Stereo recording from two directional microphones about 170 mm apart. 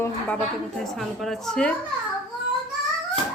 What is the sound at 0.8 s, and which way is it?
Speech, centre (ahead or behind).